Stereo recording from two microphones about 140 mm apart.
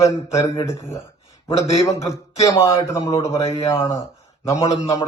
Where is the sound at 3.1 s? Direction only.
45° left (ahead or behind).